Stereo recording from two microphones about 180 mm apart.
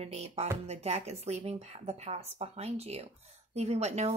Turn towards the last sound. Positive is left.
turn(degrees=-35)  # may be behind; listen again after turning